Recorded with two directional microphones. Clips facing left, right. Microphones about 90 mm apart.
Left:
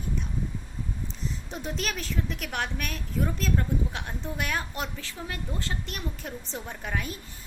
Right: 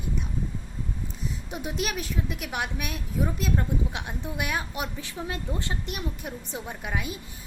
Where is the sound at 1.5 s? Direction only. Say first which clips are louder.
Right 3 dB; 10° right (ahead or behind).